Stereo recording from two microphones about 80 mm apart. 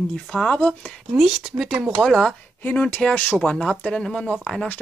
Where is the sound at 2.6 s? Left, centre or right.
Centre.